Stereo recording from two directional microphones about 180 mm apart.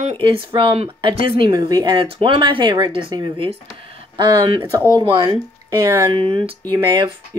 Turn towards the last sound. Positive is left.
turn(degrees=-25)  # may be behind; listen again after turning